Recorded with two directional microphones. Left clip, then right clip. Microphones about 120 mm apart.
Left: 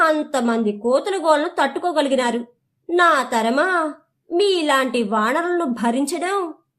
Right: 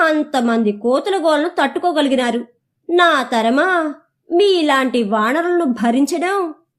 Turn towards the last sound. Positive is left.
turn(degrees=-30)  # may be behind; listen again after turning